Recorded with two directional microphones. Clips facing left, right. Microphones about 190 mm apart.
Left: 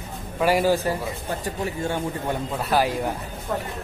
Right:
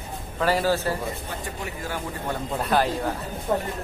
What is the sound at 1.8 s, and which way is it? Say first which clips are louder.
Speech: left 3 dB; 25° left (ahead or behind).